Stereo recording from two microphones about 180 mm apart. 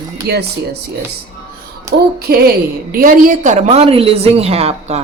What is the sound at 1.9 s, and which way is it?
Child singing, 20° right (ahead or behind).